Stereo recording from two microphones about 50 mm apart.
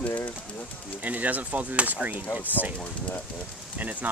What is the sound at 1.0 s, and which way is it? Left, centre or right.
Speech, right.